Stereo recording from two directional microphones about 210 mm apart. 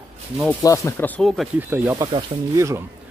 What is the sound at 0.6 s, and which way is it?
Speech, 15° left (ahead or behind).